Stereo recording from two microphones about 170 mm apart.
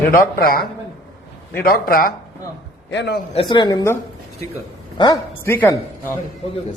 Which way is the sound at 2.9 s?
90° left.